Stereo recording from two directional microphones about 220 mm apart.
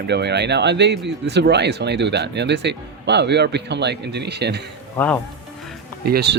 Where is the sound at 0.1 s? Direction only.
50° right (ahead or behind).